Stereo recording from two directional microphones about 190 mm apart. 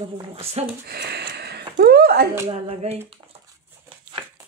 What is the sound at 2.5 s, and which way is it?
Speech, 35° right (ahead or behind).